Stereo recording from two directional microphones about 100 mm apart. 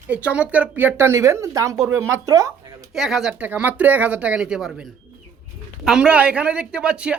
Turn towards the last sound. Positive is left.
turn(degrees=-10)  # may be behind; listen again after turning